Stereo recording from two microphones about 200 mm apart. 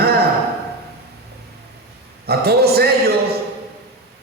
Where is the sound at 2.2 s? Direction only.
50° right (ahead or behind).